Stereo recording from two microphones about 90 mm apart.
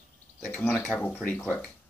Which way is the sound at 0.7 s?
10° left (ahead or behind).